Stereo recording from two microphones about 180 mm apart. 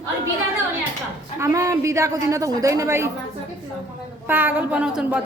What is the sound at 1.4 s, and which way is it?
A woman's voice, 15° right (ahead or behind).